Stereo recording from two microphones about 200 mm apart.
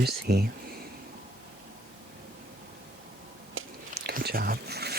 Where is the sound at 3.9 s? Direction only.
50° right (ahead or behind).